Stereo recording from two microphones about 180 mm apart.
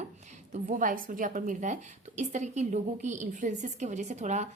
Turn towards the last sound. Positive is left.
turn(degrees=-40)  # may be behind; listen again after turning